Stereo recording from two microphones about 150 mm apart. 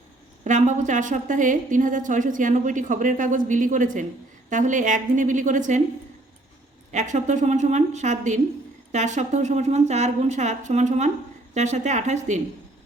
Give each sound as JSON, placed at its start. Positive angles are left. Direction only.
{"t": 0.4, "sound": "a woman's voice", "side_deg": -55}
{"t": 6.9, "sound": "speech", "side_deg": -55}